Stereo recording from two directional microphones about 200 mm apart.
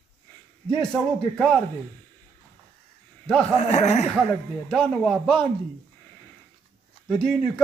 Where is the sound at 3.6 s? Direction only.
35° left (ahead or behind).